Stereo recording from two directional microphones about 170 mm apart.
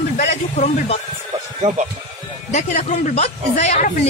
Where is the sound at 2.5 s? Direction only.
45° left (ahead or behind).